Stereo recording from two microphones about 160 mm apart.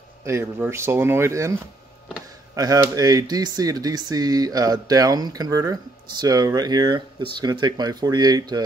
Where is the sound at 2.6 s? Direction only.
25° right (ahead or behind).